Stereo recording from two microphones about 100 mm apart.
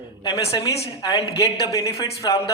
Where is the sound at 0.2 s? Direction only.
45° left (ahead or behind).